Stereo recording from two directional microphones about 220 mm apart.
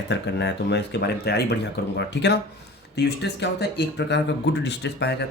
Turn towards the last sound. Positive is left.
turn(degrees=50)  # may be behind; listen again after turning